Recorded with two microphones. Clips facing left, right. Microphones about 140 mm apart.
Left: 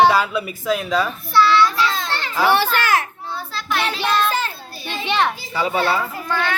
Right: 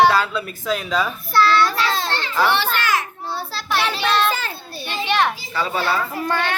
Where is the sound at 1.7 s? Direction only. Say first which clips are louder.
Even; 35° right (ahead or behind).